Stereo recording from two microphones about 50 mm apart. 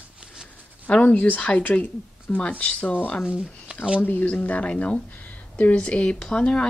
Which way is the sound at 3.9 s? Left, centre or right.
Left.